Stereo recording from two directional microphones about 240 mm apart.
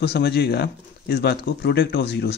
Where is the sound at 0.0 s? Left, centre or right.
Left.